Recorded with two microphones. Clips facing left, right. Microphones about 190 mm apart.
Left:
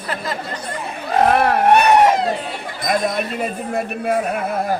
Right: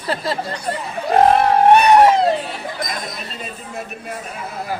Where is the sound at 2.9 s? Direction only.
65° left (ahead or behind).